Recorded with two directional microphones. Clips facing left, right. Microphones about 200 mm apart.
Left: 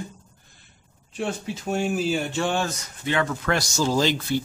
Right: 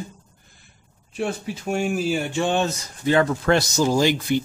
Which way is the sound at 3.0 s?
35° right (ahead or behind).